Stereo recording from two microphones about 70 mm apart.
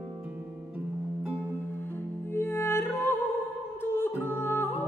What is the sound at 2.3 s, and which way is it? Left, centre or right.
Music, left.